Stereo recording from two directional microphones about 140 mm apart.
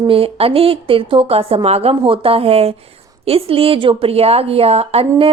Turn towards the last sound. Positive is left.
turn(degrees=-45)  # may be behind; listen again after turning